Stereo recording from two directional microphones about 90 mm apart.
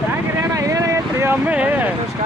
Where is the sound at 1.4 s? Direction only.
15° right (ahead or behind).